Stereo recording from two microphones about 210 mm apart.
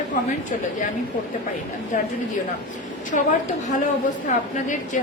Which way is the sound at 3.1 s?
40° left (ahead or behind).